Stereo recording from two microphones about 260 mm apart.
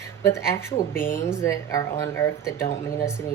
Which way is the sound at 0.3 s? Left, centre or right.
Centre.